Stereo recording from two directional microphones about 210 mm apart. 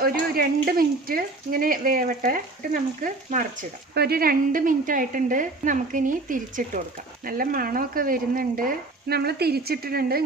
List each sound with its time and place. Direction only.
0.0 s a woman's voice: 45° right (ahead or behind)